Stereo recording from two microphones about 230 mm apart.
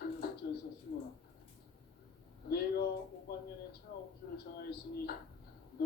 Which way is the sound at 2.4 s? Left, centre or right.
Left.